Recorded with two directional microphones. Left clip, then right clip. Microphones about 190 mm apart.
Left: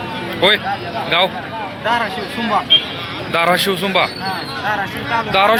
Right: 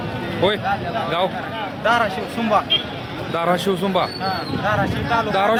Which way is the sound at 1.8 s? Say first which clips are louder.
Even; 35° right (ahead or behind).